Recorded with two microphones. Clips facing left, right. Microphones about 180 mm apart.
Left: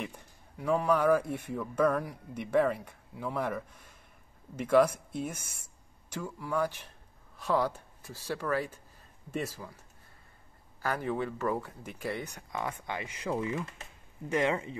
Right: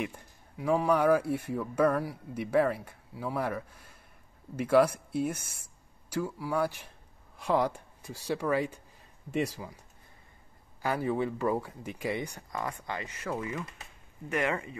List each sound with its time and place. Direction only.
0.6 s speech: 10° right (ahead or behind)
10.8 s speech: 10° right (ahead or behind)
12.4 s speech: centre (ahead or behind)
12.7 s speech: 15° left (ahead or behind)